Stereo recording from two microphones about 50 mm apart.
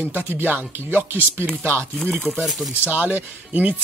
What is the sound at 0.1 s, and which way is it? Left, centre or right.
Speech, right.